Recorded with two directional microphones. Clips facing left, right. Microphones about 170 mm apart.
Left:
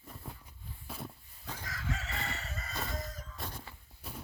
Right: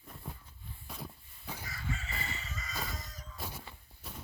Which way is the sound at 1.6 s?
90° left.